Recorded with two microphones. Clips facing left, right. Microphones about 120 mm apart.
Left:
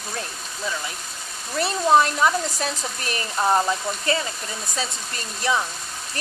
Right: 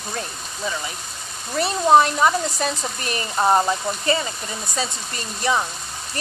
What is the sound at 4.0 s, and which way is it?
Speech, centre (ahead or behind).